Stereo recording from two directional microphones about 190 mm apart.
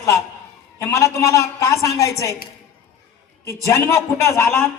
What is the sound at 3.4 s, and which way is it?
A woman's voice, 15° left (ahead or behind).